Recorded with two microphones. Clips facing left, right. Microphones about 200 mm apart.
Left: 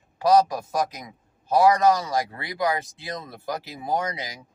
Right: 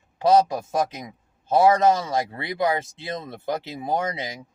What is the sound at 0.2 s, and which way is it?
A man's voice, 25° right (ahead or behind).